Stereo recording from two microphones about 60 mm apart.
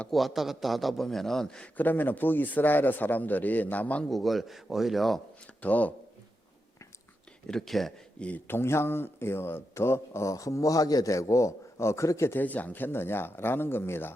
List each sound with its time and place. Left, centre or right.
0.1 s a man's voice: centre
1.7 s a man's voice: left
4.1 s a man's voice: centre
5.6 s speech: left
7.4 s a man's voice: centre
8.4 s speech: left
10.3 s a man's voice: left
12.4 s a man's voice: left